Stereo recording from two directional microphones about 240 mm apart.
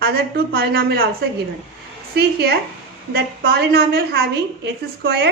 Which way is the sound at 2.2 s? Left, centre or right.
Right.